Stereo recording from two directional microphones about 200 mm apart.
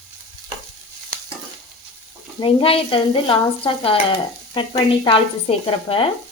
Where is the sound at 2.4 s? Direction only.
25° left (ahead or behind).